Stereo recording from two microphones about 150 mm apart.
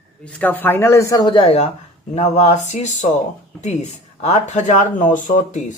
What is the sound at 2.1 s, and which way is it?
Speech, 50° left (ahead or behind).